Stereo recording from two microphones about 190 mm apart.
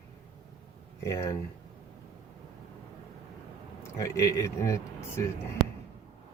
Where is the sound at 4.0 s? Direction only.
15° left (ahead or behind).